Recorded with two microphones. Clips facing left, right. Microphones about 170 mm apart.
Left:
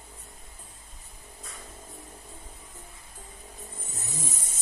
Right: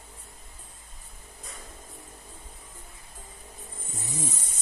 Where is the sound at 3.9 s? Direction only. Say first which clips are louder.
Right 4 dB; 10° right (ahead or behind).